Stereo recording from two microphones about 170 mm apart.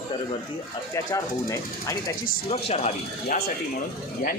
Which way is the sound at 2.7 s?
40° left (ahead or behind).